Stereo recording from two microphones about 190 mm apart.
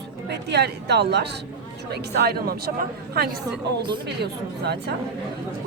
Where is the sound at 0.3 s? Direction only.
60° right (ahead or behind).